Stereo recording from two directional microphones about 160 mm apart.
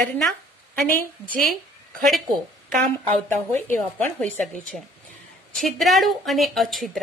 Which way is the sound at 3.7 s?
10° left (ahead or behind).